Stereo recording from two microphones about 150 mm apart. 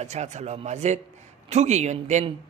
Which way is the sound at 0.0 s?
50° right (ahead or behind).